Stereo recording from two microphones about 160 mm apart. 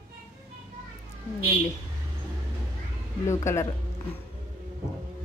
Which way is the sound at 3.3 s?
15° left (ahead or behind).